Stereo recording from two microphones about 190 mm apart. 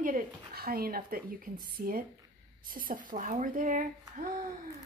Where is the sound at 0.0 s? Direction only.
50° right (ahead or behind).